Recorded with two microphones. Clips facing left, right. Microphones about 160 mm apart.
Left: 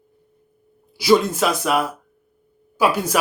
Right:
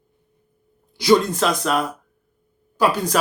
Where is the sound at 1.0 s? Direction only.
5° left (ahead or behind).